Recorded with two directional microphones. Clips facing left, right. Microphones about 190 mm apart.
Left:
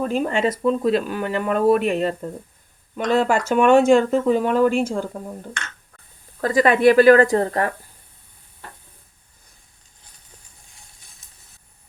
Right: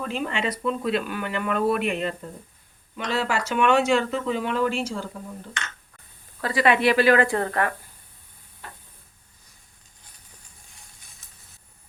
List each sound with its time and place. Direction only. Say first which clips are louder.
0.0 s speech: left 7 dB; 40° left (ahead or behind)
3.0 s speech: left 7 dB; 50° left (ahead or behind)
6.4 s speech: left 6 dB; 45° left (ahead or behind)